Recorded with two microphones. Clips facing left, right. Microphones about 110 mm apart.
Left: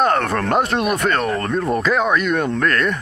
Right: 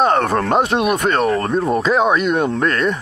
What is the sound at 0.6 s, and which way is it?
Speech, 5° right (ahead or behind).